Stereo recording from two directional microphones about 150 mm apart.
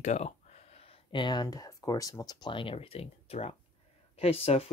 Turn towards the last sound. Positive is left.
turn(degrees=40)  # may be behind; listen again after turning